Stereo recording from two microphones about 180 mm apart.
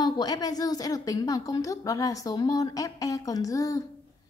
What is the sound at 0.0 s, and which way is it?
A woman's voice, 20° left (ahead or behind).